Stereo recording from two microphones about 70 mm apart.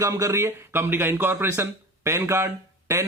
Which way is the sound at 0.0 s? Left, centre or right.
Right.